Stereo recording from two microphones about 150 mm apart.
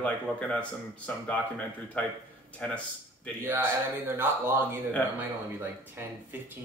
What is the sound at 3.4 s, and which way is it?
Speech, 15° right (ahead or behind).